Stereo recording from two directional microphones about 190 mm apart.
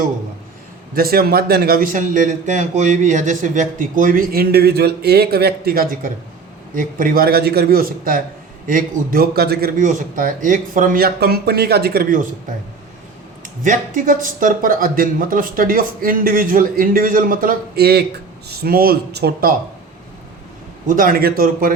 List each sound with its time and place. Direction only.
0.9 s a man's voice: 50° right (ahead or behind)
13.7 s a man's voice: 45° right (ahead or behind)
20.8 s a man's voice: 45° right (ahead or behind)